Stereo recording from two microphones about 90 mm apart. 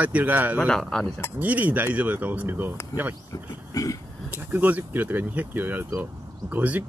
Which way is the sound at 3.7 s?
40° left (ahead or behind).